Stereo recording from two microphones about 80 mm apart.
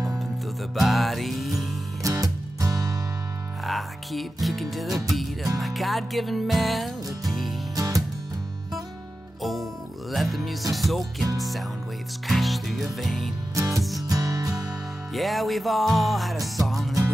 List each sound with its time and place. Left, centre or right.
0.7 s music: centre
2.0 s music: right
3.6 s speech: centre
5.6 s music: centre
7.7 s music: right
10.1 s music: centre
13.6 s music: right
15.1 s music: centre